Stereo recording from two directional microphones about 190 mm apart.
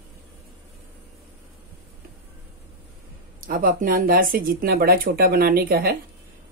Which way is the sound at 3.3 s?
50° right (ahead or behind).